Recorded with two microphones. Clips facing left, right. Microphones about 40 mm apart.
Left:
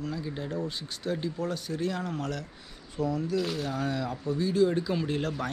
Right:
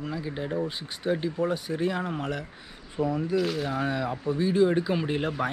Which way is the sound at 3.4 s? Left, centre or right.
Centre.